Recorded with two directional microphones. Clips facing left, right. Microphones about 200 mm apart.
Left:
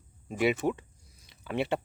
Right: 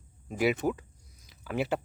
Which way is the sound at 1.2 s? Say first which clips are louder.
Even; centre (ahead or behind).